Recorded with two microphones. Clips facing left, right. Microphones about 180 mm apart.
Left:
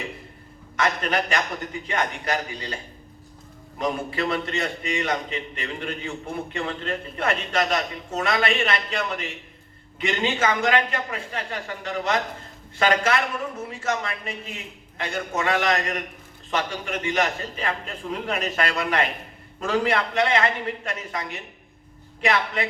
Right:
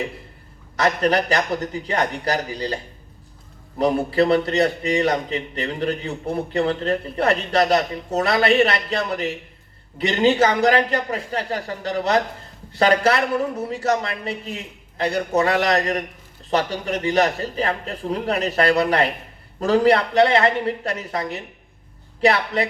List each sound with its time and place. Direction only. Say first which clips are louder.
0.8 s a man's voice: right 5 dB; 35° right (ahead or behind)